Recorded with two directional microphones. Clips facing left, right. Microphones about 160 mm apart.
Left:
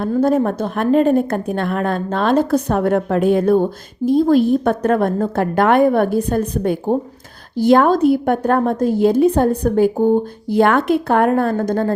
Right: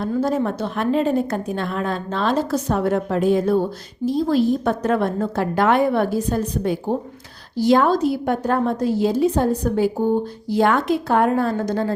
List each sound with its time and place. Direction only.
0.0 s a woman's voice: 55° left (ahead or behind)